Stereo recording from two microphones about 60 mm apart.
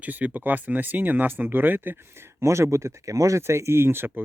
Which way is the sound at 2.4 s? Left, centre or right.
Right.